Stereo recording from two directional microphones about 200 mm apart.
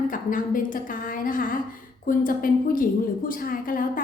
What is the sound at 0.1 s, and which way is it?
A woman's voice, 40° left (ahead or behind).